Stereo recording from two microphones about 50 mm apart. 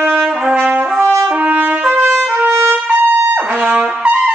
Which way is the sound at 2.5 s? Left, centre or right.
Right.